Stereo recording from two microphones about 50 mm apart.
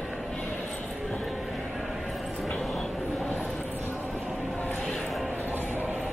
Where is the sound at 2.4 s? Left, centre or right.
Centre.